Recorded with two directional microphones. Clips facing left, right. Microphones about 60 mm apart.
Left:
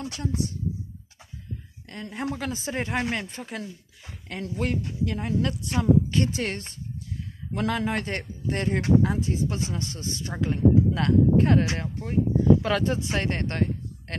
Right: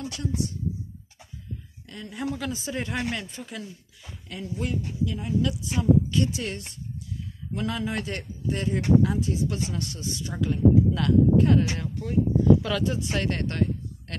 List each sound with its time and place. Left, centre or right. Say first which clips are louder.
0.0 s speech: even; left
1.9 s speech: even; left
4.3 s a woman's voice: left 2 dB; left